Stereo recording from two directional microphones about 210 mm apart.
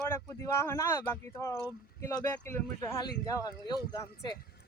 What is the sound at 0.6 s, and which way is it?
Speech, 10° left (ahead or behind).